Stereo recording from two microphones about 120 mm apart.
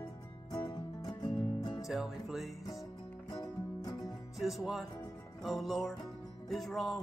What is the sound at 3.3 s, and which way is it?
Music, 35° left (ahead or behind).